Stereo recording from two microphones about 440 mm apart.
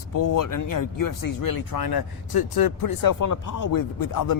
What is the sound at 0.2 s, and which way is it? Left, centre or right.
Speech, left.